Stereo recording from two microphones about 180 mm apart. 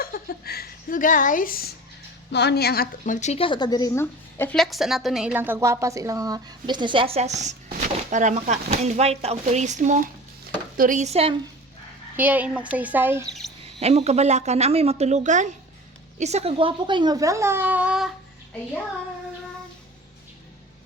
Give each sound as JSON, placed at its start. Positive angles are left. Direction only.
{"t": 0.0, "sound": "speech", "side_deg": 55}
{"t": 2.3, "sound": "a woman's voice", "side_deg": 70}
{"t": 4.5, "sound": "a woman's voice", "side_deg": 0}
{"t": 12.1, "sound": "speech", "side_deg": -10}
{"t": 13.7, "sound": "a woman's voice", "side_deg": -35}